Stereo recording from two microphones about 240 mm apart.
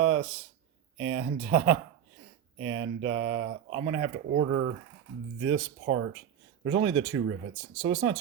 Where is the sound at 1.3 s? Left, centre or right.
Right.